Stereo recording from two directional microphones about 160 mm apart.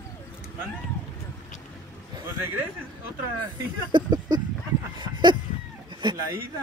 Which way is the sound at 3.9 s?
25° right (ahead or behind).